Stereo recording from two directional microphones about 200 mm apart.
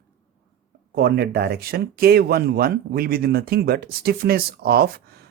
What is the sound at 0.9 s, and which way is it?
Speech, 50° right (ahead or behind).